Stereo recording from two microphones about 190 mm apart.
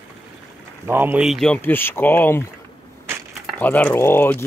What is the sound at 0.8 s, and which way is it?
Speech, 10° right (ahead or behind).